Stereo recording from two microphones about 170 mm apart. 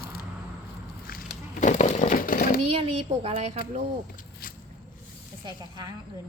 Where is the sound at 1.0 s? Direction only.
55° left (ahead or behind).